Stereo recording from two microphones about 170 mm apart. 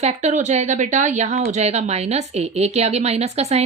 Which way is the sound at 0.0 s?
40° right (ahead or behind).